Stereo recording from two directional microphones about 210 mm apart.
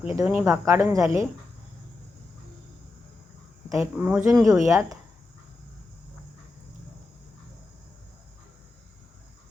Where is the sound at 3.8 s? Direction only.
10° right (ahead or behind).